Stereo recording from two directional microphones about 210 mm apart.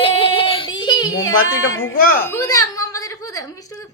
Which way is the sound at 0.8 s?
20° left (ahead or behind).